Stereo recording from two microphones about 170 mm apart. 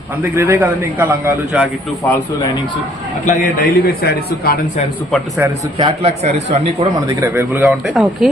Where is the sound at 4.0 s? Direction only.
65° left (ahead or behind).